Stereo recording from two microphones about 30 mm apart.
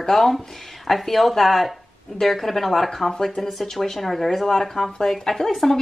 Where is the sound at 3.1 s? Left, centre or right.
Left.